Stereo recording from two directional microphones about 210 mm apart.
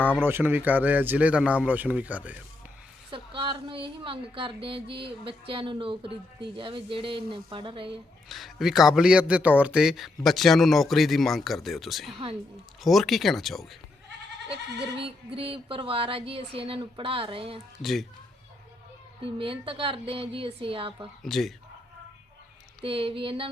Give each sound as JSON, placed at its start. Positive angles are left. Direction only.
{"t": 0.0, "sound": "speech", "side_deg": 5}
{"t": 0.3, "sound": "a man's voice", "side_deg": -10}
{"t": 3.1, "sound": "speech", "side_deg": -25}
{"t": 8.3, "sound": "speech", "side_deg": 0}
{"t": 14.5, "sound": "speech", "side_deg": -25}
{"t": 19.2, "sound": "speech", "side_deg": -25}
{"t": 21.2, "sound": "speech", "side_deg": 0}
{"t": 22.8, "sound": "speech", "side_deg": -25}